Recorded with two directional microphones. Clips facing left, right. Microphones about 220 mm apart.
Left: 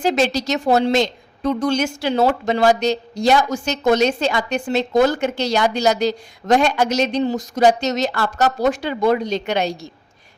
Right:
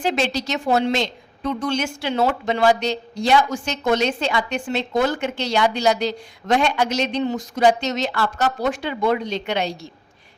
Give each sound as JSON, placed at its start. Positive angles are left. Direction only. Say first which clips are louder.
{"t": 0.0, "sound": "a woman's voice", "louder": "left 4 dB", "side_deg": 40}